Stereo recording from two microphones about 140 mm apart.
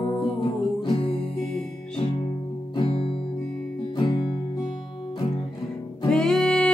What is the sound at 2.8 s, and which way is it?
Music, 40° left (ahead or behind).